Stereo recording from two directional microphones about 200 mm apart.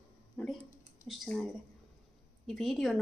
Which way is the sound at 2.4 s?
Centre (ahead or behind).